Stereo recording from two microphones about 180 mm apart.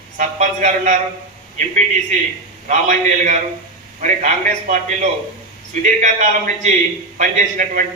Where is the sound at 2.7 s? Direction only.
40° right (ahead or behind).